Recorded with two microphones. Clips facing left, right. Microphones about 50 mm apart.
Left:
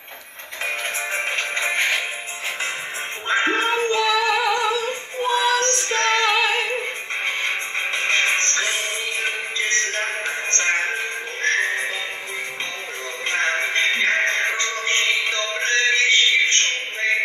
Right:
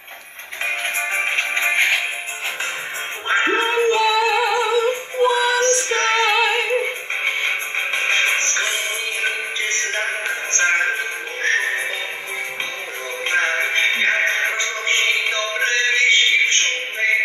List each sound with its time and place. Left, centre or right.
0.7 s music: right
3.3 s music: right
5.6 s music: right; by 6.9 s centre
7.2 s music: right
13.3 s music: right